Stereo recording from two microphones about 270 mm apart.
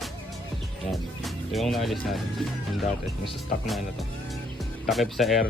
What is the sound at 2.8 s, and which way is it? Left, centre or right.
Speech, left.